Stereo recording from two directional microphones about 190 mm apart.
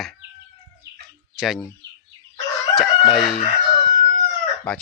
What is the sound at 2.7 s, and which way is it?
Chicken, centre (ahead or behind).